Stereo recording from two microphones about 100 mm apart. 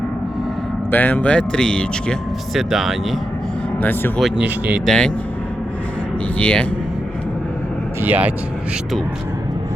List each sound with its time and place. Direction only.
0.9 s speech: 20° left (ahead or behind)
2.6 s speech: 5° right (ahead or behind)
3.8 s speech: 20° left (ahead or behind)
4.4 s speech: 15° right (ahead or behind)
4.9 s speech: 10° left (ahead or behind)
6.4 s speech: 10° left (ahead or behind)
8.0 s speech: 15° right (ahead or behind)